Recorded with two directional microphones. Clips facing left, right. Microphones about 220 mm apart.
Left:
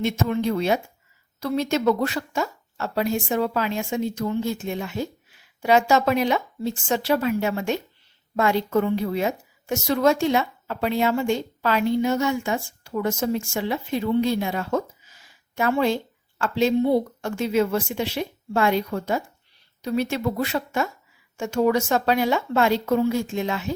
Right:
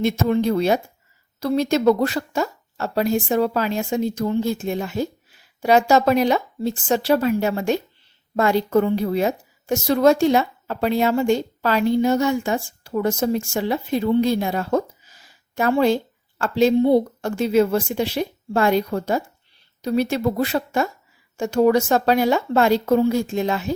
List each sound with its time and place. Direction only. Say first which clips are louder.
0.0 s a woman's voice: right 4 dB; 35° right (ahead or behind)